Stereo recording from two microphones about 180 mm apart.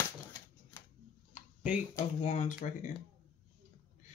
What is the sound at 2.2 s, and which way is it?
Speech, 40° left (ahead or behind).